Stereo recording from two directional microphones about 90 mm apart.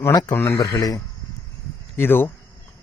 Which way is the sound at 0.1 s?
45° left (ahead or behind).